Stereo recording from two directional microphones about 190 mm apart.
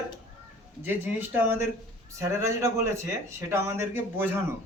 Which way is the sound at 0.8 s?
10° right (ahead or behind).